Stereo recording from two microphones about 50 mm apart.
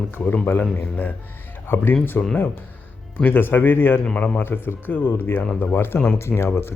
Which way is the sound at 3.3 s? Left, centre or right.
Left.